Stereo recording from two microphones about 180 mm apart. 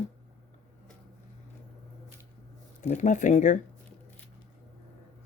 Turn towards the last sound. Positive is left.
turn(degrees=45)  # may be behind; listen again after turning